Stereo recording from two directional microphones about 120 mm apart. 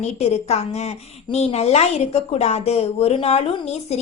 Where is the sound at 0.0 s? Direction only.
65° left (ahead or behind).